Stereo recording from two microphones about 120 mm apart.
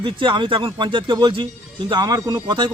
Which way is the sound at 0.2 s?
45° right (ahead or behind).